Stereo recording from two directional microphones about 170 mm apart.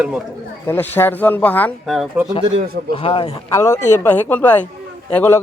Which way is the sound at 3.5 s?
15° left (ahead or behind).